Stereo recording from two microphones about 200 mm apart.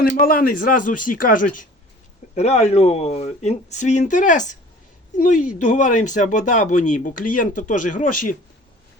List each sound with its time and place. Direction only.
0.0 s speech: 45° left (ahead or behind)